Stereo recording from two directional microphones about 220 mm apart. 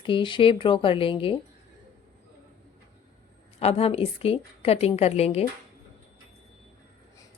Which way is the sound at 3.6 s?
25° left (ahead or behind).